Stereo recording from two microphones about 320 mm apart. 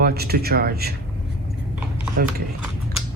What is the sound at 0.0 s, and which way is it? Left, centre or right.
Speech, right.